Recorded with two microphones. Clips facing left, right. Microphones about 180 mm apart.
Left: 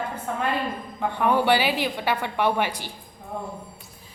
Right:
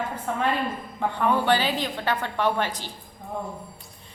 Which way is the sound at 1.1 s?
15° left (ahead or behind).